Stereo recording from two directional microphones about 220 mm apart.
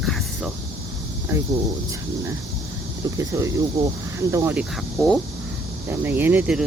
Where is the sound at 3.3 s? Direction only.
15° right (ahead or behind).